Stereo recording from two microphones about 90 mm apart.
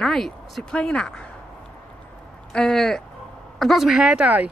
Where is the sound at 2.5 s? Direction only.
10° left (ahead or behind); by 4.4 s 15° right (ahead or behind).